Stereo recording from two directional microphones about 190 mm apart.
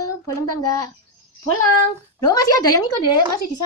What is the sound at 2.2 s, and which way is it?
Speech, 20° left (ahead or behind).